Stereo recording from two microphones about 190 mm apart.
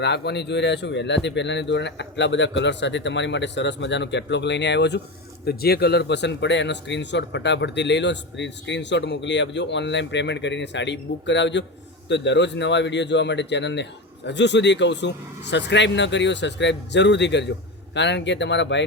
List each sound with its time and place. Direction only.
0.0 s a man's voice: 60° left (ahead or behind)